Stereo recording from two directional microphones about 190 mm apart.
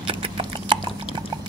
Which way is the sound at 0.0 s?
25° right (ahead or behind).